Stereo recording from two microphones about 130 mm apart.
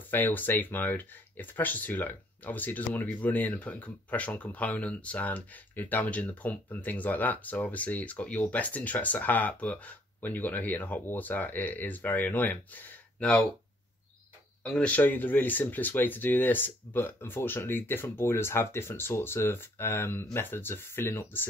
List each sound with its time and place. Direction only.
0.1 s speech: 15° left (ahead or behind)
14.6 s speech: 10° left (ahead or behind)